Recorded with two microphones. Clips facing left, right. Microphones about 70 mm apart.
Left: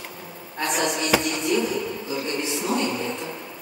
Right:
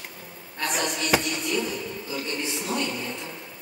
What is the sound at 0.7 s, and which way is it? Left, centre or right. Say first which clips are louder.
Speech: left 4 dB; left.